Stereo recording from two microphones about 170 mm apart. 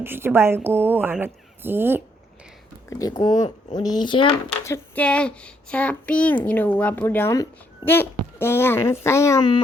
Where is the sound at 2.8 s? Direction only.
20° left (ahead or behind).